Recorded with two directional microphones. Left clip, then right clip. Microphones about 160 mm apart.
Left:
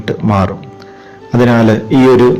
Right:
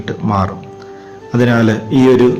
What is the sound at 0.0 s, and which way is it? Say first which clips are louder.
A man's voice: left 3 dB; 25° left (ahead or behind).